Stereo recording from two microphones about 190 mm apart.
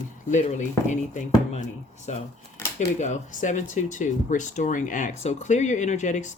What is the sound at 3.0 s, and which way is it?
Speech, 40° left (ahead or behind).